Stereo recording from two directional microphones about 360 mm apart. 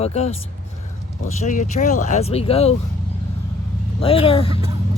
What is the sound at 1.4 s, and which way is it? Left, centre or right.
Speech, centre.